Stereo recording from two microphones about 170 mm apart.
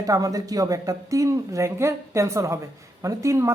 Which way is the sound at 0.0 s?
20° right (ahead or behind).